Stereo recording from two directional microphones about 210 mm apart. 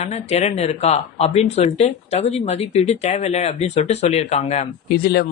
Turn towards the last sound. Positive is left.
turn(degrees=45)  # may be behind; listen again after turning